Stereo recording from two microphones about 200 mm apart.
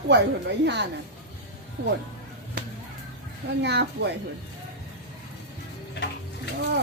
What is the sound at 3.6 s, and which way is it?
Speech, 60° right (ahead or behind).